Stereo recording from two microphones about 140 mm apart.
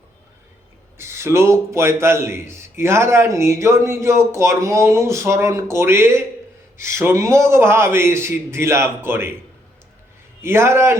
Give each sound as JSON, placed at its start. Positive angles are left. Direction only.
{"t": 0.9, "sound": "a man's voice", "side_deg": -20}
{"t": 10.4, "sound": "a man's voice", "side_deg": -20}